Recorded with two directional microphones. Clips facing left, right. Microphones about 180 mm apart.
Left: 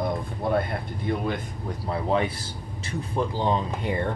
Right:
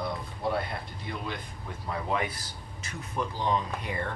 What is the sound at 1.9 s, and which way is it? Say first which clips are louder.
Speech: left 6 dB; 30° left (ahead or behind).